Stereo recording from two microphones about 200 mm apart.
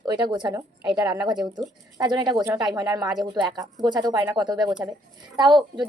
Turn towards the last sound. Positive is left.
turn(degrees=-25)  # may be behind; listen again after turning